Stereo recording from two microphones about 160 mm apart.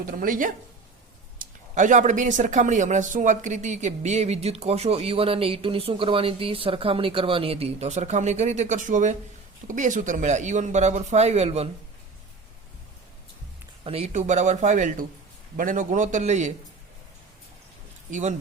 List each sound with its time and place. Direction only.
0.0 s speech: 60° right (ahead or behind); by 11.7 s 40° right (ahead or behind)
13.8 s speech: 40° right (ahead or behind)
18.1 s speech: 45° right (ahead or behind)